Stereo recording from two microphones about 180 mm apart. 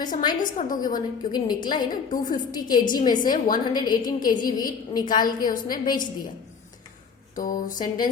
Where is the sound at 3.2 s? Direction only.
50° left (ahead or behind).